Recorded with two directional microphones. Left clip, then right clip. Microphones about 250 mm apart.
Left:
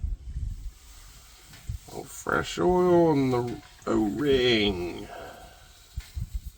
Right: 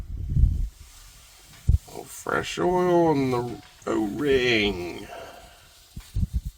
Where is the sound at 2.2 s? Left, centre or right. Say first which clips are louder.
Even; right.